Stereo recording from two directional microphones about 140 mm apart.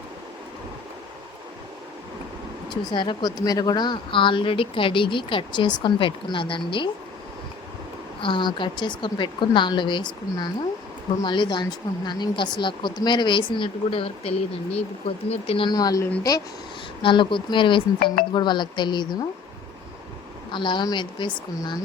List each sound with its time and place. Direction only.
2.8 s speech: 35° left (ahead or behind)
8.2 s speech: 35° left (ahead or behind)
15.7 s speech: 25° left (ahead or behind)
18.0 s speech: 90° left
18.3 s speech: 35° left (ahead or behind)
20.5 s speech: 35° left (ahead or behind)